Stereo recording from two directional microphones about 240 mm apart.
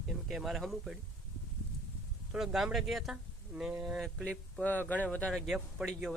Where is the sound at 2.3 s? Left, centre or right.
Centre.